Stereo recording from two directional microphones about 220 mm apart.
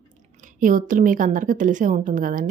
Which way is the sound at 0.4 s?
35° right (ahead or behind).